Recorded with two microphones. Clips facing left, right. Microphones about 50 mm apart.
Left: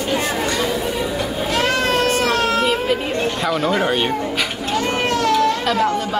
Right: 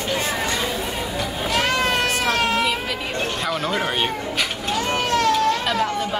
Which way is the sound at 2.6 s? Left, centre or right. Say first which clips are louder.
Left 5 dB; left.